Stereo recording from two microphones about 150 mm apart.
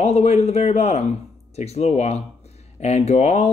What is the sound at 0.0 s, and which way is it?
Speech, 45° left (ahead or behind).